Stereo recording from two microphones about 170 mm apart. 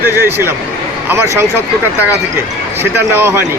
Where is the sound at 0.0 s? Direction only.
10° right (ahead or behind).